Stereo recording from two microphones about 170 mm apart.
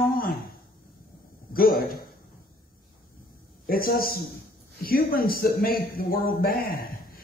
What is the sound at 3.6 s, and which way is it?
A man's voice, 60° left (ahead or behind).